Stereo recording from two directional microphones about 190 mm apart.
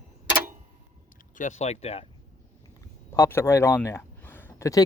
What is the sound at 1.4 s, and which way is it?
Speech, 40° left (ahead or behind).